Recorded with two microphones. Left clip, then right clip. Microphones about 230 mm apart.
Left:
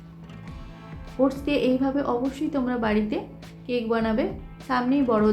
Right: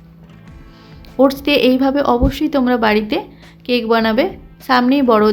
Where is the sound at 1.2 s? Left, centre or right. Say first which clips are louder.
Right 11 dB; right.